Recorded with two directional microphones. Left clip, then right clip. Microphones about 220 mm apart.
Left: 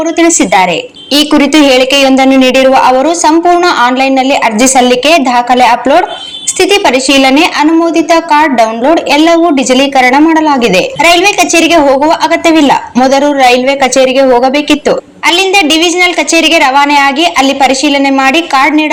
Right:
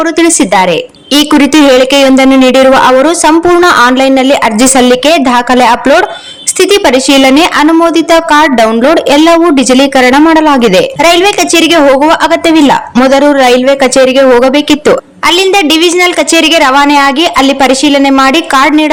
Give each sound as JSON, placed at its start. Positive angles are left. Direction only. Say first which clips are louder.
{"t": 0.2, "sound": "a woman's voice", "louder": "left 1 dB", "side_deg": -25}